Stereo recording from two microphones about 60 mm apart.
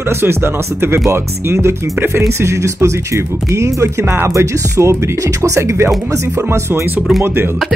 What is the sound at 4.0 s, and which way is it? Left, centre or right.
Speech, right.